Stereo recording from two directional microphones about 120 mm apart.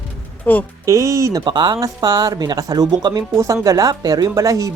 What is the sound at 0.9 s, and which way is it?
Speech, 25° right (ahead or behind).